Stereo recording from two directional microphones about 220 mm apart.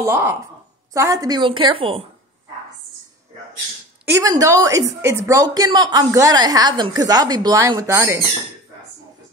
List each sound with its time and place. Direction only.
0.0 s a woman's voice: 10° right (ahead or behind)
4.2 s a woman's voice: 15° right (ahead or behind)